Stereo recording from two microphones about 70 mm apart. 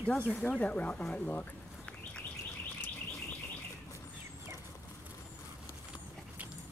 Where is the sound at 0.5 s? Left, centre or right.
Centre.